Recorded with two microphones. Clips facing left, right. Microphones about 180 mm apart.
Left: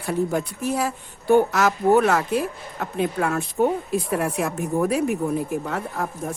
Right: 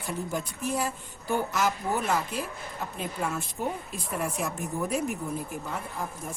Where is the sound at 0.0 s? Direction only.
70° left (ahead or behind).